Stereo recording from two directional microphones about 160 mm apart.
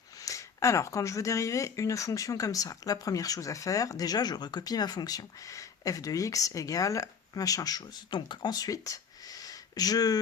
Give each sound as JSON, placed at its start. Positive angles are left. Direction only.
{"t": 0.2, "sound": "speech", "side_deg": 20}